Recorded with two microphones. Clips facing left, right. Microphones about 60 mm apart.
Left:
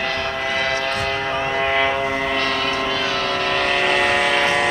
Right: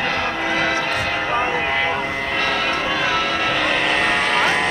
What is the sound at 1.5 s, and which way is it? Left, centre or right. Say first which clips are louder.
Vehicle: left 1 dB; centre.